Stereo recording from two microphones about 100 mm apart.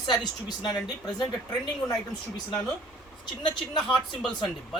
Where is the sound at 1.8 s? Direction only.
15° left (ahead or behind).